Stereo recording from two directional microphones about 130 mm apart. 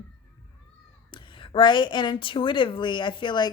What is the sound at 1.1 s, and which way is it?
Speech, 40° left (ahead or behind).